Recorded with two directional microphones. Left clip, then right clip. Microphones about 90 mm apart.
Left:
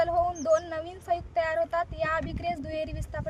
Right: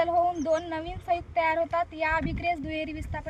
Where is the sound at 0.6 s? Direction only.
40° left (ahead or behind).